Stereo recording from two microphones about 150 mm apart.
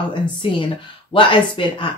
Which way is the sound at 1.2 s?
35° left (ahead or behind).